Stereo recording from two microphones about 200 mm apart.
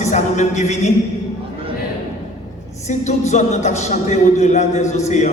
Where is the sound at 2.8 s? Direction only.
35° left (ahead or behind).